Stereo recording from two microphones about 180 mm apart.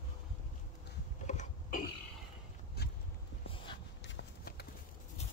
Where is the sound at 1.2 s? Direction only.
40° left (ahead or behind).